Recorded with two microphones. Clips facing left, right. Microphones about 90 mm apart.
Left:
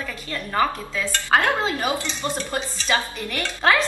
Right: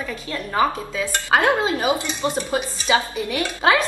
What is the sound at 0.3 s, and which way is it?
A woman's voice, 15° right (ahead or behind).